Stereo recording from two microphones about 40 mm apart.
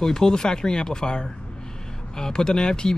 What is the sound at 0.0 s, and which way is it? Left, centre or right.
Speech, centre.